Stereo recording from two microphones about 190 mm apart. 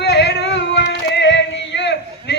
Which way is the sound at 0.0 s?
60° left (ahead or behind).